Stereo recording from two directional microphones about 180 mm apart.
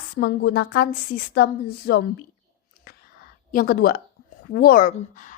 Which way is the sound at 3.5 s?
50° left (ahead or behind).